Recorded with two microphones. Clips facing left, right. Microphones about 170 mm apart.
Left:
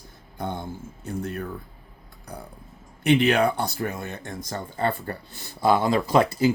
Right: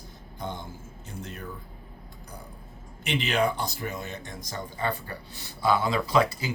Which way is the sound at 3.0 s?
55° left (ahead or behind).